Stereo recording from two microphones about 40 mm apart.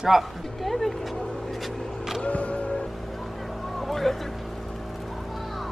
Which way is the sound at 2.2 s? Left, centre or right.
Left.